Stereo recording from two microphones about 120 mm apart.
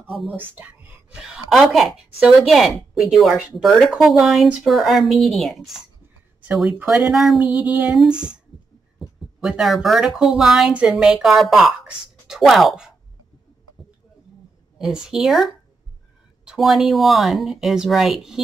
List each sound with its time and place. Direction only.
0.0 s speech: centre (ahead or behind)
0.4 s a woman's voice: 15° right (ahead or behind)
7.4 s female singing: 10° right (ahead or behind)
9.0 s a woman's voice: 5° right (ahead or behind)
14.8 s a woman's voice: 5° right (ahead or behind)